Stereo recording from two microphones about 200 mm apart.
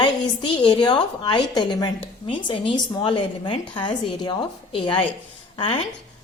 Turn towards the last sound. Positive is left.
turn(degrees=25)  # may be behind; listen again after turning